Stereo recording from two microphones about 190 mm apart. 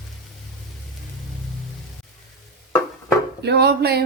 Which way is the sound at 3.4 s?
60° right (ahead or behind).